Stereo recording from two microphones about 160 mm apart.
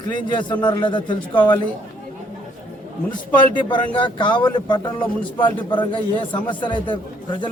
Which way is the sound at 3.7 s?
30° left (ahead or behind).